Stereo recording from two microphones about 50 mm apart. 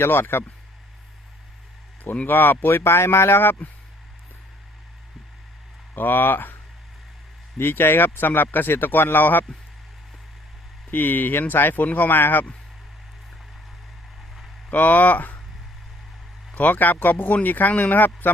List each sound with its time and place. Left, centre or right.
0.0 s speech: left
2.2 s speech: left
6.0 s speech: left
7.6 s speech: left
10.9 s speech: left
14.7 s speech: left
16.6 s speech: left